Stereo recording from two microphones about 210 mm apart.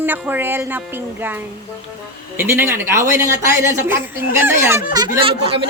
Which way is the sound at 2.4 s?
10° right (ahead or behind).